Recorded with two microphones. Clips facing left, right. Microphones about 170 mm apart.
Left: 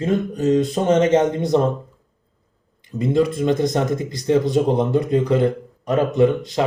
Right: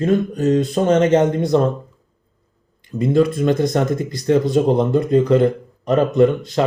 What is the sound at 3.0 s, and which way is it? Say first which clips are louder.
Speech: right 2 dB; 20° left (ahead or behind).